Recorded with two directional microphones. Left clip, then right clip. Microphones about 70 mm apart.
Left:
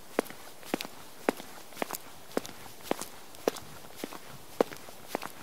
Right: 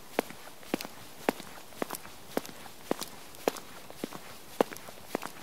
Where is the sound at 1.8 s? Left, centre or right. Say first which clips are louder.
Left 1 dB; left.